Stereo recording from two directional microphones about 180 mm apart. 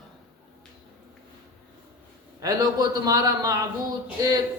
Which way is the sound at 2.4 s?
20° right (ahead or behind).